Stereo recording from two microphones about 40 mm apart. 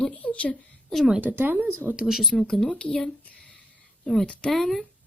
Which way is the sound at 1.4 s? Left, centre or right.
Right.